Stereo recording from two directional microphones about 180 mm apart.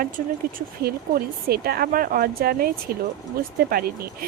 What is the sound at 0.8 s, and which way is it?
Speech, 60° right (ahead or behind).